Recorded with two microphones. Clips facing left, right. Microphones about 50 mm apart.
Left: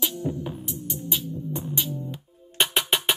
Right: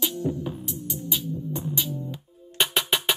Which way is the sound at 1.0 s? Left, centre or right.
Left.